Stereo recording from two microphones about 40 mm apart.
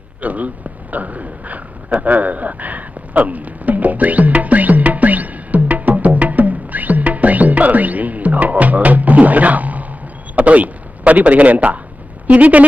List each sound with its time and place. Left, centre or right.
0.2 s speech: right
0.9 s a sound: right
10.3 s speech: right